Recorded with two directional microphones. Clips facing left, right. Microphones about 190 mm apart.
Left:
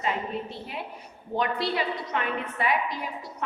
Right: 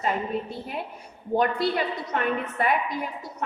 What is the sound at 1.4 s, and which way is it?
A woman's voice, 45° right (ahead or behind).